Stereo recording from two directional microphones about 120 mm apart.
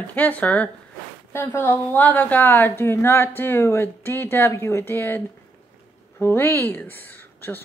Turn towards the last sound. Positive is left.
turn(degrees=15)  # may be behind; listen again after turning